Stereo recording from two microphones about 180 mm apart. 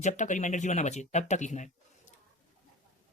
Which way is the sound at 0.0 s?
40° left (ahead or behind).